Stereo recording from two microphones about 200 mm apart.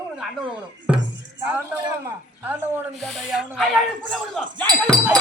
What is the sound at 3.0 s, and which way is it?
Speech, centre (ahead or behind).